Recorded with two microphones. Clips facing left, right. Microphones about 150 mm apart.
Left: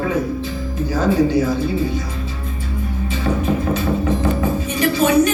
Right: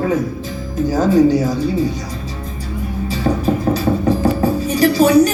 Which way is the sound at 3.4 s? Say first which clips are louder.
Right 3 dB; 35° right (ahead or behind).